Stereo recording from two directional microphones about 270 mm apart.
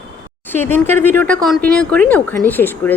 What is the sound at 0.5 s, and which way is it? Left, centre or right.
A woman's voice, centre.